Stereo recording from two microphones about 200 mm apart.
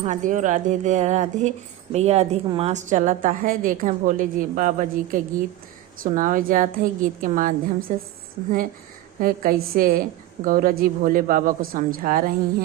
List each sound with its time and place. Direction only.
0.0 s a woman's voice: 40° right (ahead or behind)
9.2 s a man's voice: 45° right (ahead or behind)